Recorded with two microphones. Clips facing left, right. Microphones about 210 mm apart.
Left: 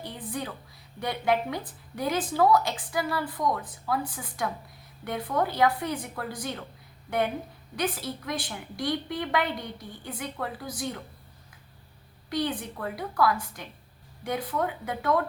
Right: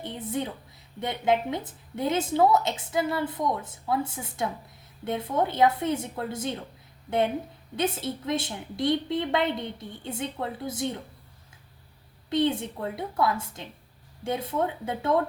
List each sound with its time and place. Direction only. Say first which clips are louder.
0.0 s a woman's voice: right 4 dB; 20° right (ahead or behind)
7.8 s a woman's voice: right 2 dB; 25° right (ahead or behind)
12.3 s a woman's voice: right 5 dB; 25° right (ahead or behind)